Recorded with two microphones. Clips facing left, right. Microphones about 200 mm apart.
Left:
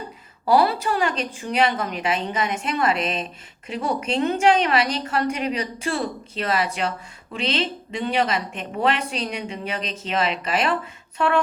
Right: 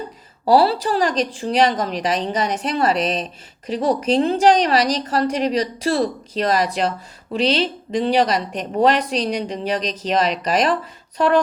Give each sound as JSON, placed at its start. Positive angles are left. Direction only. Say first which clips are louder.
{"t": 0.4, "sound": "a woman's voice", "louder": "right 3 dB", "side_deg": -35}